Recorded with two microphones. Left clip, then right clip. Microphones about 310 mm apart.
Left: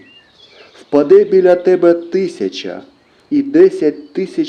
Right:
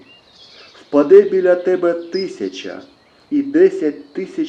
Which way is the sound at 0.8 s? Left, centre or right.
Left.